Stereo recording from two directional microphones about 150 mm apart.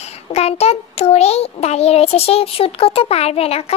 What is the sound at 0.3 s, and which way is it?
A child's voice, 45° left (ahead or behind).